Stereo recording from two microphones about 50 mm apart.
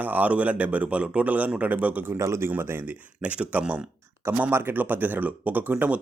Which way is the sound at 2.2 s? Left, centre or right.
Right.